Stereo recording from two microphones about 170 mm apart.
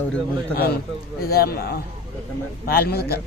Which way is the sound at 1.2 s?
65° left (ahead or behind).